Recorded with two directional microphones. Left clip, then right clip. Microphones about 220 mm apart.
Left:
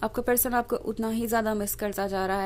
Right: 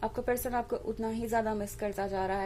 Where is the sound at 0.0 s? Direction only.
30° left (ahead or behind).